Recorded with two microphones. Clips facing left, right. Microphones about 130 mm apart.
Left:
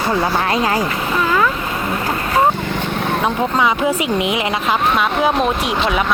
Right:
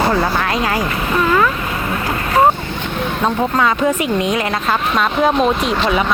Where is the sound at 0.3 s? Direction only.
25° left (ahead or behind).